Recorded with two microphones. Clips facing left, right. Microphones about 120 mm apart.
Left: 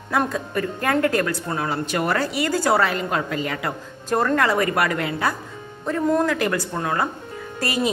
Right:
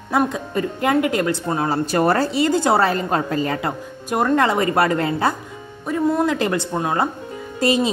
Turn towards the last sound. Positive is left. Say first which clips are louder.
# right 5 dB
turn(degrees=-25)  # may be behind; listen again after turning